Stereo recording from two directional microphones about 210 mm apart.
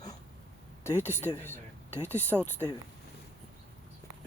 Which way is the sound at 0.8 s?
10° left (ahead or behind).